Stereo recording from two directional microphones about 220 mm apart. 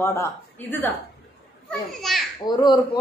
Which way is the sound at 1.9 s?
Centre (ahead or behind).